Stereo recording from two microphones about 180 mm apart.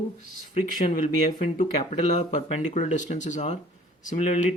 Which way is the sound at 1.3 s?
45° left (ahead or behind).